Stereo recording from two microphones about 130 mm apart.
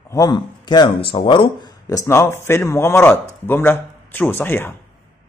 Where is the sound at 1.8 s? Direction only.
25° left (ahead or behind).